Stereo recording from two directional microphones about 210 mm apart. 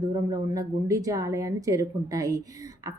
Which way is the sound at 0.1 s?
15° right (ahead or behind).